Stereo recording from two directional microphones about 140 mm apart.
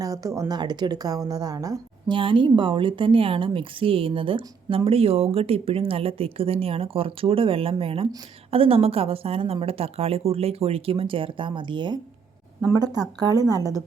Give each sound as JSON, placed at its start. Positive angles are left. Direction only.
{"t": 0.0, "sound": "a woman's voice", "side_deg": -25}
{"t": 2.1, "sound": "a woman's voice", "side_deg": -35}